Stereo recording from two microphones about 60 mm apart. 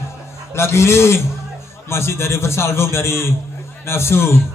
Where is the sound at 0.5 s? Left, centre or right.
Left.